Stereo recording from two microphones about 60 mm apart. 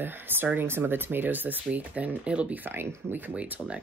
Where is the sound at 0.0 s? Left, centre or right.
Right.